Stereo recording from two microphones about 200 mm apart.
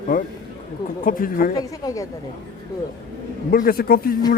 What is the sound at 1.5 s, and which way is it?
Speech, 15° left (ahead or behind).